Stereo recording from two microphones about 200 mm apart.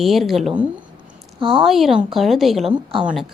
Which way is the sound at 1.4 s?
25° right (ahead or behind).